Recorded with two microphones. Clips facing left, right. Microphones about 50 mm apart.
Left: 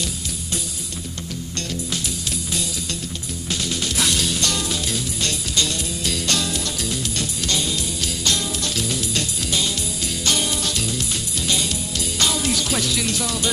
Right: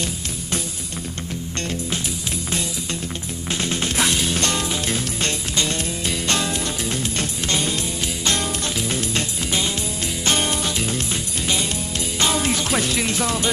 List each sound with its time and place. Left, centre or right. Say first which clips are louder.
3.4 s music: right 2 dB; right
10.6 s music: right 2 dB; right